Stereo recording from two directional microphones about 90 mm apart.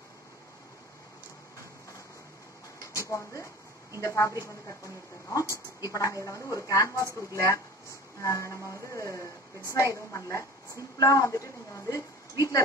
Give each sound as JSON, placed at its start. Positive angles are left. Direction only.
{"t": 2.8, "sound": "a woman's voice", "side_deg": 35}